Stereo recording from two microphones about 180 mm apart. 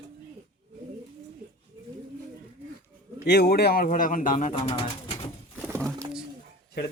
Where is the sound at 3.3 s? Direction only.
65° left (ahead or behind); by 4.9 s 30° left (ahead or behind).